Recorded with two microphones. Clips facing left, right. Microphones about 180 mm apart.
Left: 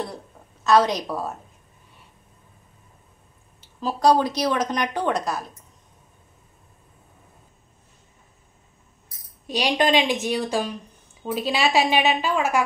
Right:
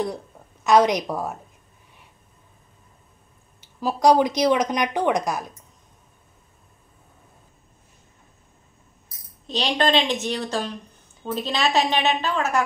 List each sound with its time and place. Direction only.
0.7 s speech: 15° right (ahead or behind)
3.6 s speech: 15° right (ahead or behind)
9.5 s a woman's voice: 10° left (ahead or behind)